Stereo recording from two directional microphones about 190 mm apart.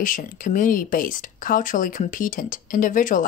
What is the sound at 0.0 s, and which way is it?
Speech, 45° left (ahead or behind).